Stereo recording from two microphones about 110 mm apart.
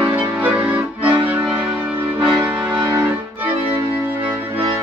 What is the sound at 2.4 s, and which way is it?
Music, 15° right (ahead or behind).